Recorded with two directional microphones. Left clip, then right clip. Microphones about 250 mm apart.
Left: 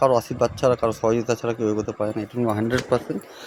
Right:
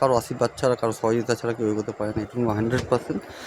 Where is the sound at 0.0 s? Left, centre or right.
Centre.